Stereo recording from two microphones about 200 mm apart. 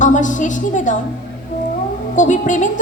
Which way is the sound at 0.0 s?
40° left (ahead or behind).